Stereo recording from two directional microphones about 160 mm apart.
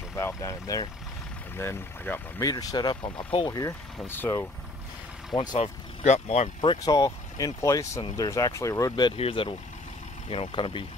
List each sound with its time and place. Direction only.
0.1 s speech: 15° left (ahead or behind)
2.5 s speech: 25° left (ahead or behind)
5.3 s speech: 25° left (ahead or behind)
5.6 s speech: 40° left (ahead or behind)